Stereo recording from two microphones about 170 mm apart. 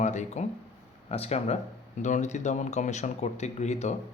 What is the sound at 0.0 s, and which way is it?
Speech, 45° left (ahead or behind).